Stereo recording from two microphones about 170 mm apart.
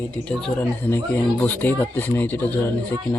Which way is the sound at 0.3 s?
5° left (ahead or behind).